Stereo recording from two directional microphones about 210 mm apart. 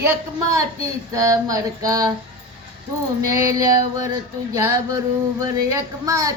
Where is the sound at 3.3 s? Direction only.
15° right (ahead or behind).